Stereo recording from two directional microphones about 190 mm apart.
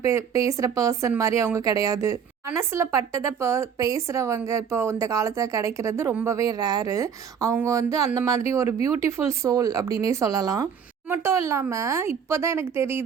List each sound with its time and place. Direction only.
0.0 s speech: 15° right (ahead or behind)